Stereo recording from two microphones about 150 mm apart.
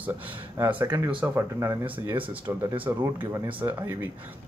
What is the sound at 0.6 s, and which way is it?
Speech, 10° right (ahead or behind).